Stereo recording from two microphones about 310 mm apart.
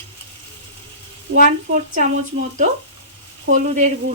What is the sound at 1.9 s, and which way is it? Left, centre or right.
Speech, right.